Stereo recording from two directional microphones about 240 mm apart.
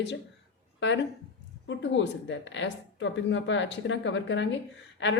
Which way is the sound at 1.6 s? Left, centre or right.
Left.